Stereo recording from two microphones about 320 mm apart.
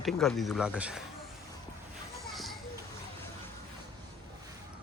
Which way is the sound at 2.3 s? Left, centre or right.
Centre.